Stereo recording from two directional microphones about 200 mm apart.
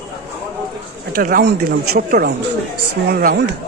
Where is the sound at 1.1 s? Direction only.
45° right (ahead or behind).